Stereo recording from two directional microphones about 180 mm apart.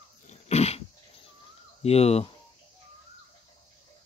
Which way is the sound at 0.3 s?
35° left (ahead or behind).